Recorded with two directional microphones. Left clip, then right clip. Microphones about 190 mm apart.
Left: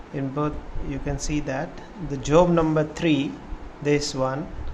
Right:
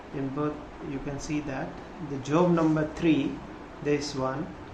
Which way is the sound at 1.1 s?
55° left (ahead or behind).